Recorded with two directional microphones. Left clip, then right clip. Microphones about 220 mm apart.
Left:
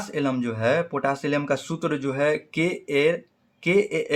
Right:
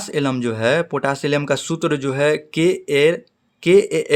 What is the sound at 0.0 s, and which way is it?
Speech, 45° right (ahead or behind).